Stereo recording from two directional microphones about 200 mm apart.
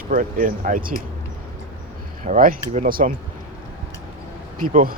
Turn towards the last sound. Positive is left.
turn(degrees=-45)  # may be behind; listen again after turning